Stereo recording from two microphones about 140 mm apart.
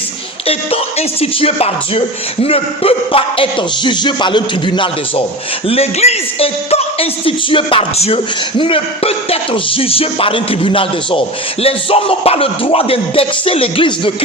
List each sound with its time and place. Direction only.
0.4 s speech: 45° left (ahead or behind)
5.6 s a man's voice: 45° left (ahead or behind)